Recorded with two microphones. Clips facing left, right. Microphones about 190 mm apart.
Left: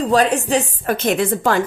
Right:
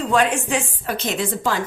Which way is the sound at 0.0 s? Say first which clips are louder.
Left 3 dB; 35° left (ahead or behind).